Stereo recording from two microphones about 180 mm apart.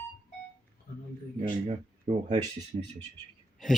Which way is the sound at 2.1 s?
35° right (ahead or behind).